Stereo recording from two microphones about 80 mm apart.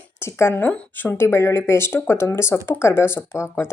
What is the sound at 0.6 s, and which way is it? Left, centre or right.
Speech, centre.